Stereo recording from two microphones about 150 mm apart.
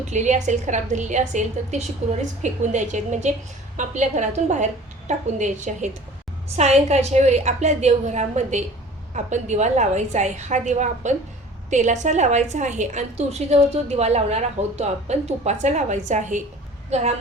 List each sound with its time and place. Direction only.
0.0 s a woman's voice: 50° right (ahead or behind)